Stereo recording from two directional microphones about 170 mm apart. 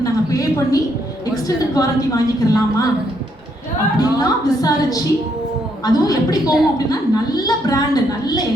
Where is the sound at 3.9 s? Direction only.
20° left (ahead or behind).